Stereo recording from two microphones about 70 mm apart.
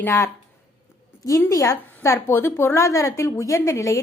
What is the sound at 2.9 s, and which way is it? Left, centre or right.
A woman's voice, left.